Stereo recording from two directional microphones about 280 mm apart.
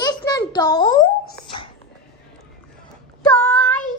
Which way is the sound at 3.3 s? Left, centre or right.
Centre.